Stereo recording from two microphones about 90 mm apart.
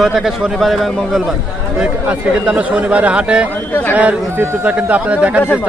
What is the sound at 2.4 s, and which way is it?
Speech, 15° right (ahead or behind).